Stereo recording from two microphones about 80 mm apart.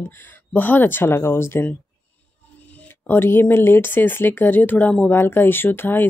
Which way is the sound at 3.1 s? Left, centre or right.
Left.